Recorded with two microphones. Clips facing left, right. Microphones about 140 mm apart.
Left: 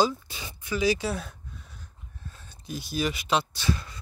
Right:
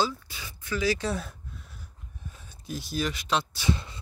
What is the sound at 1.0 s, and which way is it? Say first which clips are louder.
Speech: even; centre (ahead or behind).